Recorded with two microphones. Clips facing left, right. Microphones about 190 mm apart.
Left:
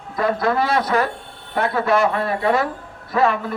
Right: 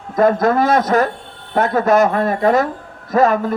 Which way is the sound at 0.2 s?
45° right (ahead or behind).